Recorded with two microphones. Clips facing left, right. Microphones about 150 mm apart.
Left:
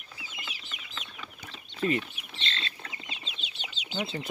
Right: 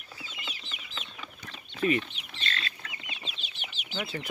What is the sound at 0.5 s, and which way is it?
Chicken, centre (ahead or behind).